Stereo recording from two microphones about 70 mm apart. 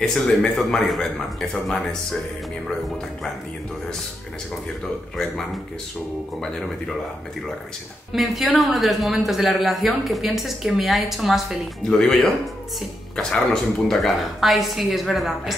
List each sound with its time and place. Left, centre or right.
0.0 s a man's voice: centre
5.1 s speech: centre
8.1 s a man's voice: centre
11.8 s a man's voice: centre